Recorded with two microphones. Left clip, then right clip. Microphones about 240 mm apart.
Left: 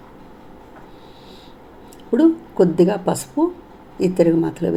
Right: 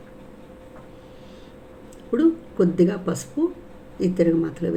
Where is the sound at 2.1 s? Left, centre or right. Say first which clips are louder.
Left 5 dB; centre.